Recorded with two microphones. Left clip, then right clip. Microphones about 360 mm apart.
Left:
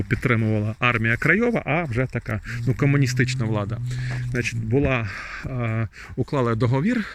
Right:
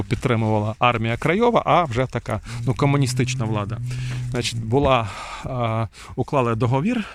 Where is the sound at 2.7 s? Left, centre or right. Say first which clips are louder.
Right 1 dB; centre.